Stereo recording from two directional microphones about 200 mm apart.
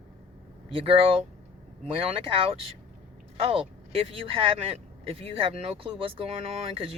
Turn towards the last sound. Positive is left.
turn(degrees=-30)  # may be behind; listen again after turning